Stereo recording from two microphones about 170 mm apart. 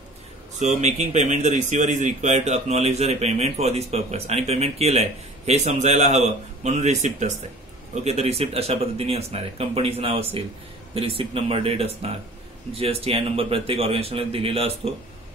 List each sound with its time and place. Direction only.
0.6 s speech: 45° right (ahead or behind)